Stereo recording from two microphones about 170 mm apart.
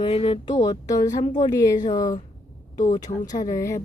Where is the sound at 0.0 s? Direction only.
35° left (ahead or behind).